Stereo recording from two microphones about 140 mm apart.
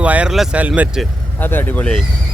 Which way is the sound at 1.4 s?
15° left (ahead or behind).